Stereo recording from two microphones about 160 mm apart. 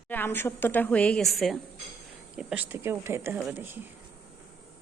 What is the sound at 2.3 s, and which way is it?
A woman's voice, 10° right (ahead or behind).